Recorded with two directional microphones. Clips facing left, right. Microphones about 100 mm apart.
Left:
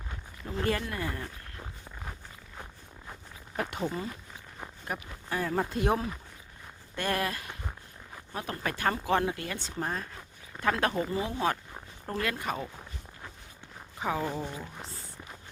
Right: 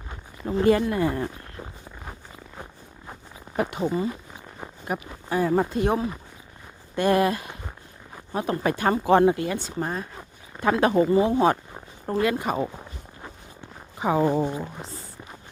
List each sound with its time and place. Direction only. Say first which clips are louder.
0.5 s speech: right 11 dB; 20° right (ahead or behind)
3.1 s zipper: right 5 dB; 20° right (ahead or behind)
3.7 s speech: right 8 dB; 10° right (ahead or behind)
5.6 s speech: right 5 dB; centre (ahead or behind)
6.9 s speech: right 10 dB; 15° right (ahead or behind)
9.6 s speech: right 5 dB; 10° right (ahead or behind)
10.2 s a sound: right 6 dB; 15° right (ahead or behind)
11.1 s speech: right 10 dB; 30° right (ahead or behind)
11.7 s a sound: right 8 dB; 15° right (ahead or behind)
14.0 s speech: right 10 dB; 25° right (ahead or behind)